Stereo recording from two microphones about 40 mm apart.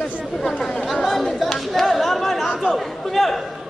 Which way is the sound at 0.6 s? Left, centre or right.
Centre.